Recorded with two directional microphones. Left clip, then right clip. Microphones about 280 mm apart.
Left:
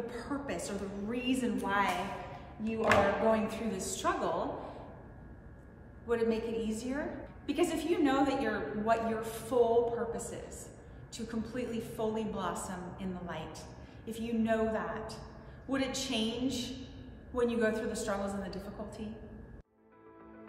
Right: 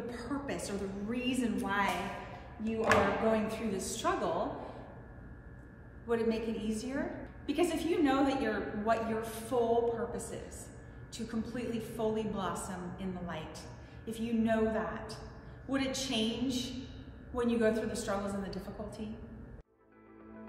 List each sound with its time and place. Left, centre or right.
0.0 s a woman's voice: centre
6.0 s a woman's voice: centre